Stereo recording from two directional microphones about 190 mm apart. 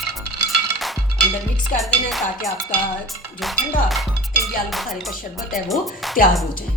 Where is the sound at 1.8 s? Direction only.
Centre (ahead or behind).